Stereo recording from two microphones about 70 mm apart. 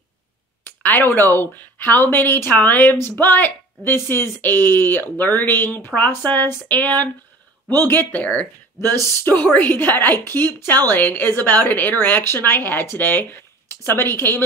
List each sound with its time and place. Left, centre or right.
0.8 s speech: left